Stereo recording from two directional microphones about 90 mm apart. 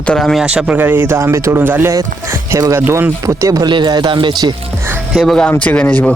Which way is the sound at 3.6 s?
55° right (ahead or behind).